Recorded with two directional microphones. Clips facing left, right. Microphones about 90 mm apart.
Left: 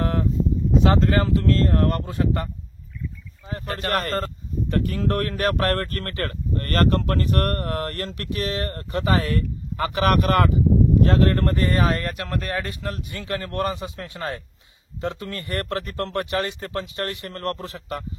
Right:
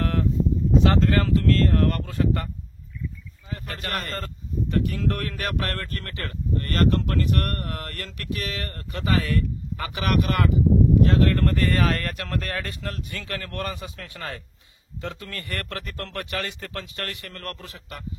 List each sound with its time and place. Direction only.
0.0 s a sound: 20° left (ahead or behind)
0.8 s speech: 20° left (ahead or behind)
3.4 s speech: 35° left (ahead or behind)
11.4 s speech: 25° left (ahead or behind)